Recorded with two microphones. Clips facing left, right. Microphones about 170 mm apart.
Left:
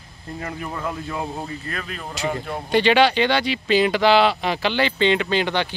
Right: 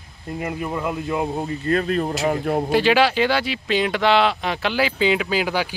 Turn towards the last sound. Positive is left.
turn(degrees=-5)  # may be behind; listen again after turning